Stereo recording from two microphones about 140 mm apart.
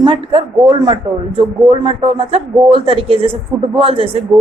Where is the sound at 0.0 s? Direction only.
40° right (ahead or behind).